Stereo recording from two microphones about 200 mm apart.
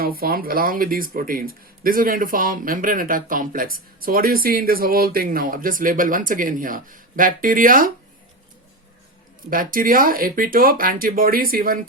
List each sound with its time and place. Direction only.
0.0 s speech: 50° right (ahead or behind)
9.5 s speech: 45° right (ahead or behind)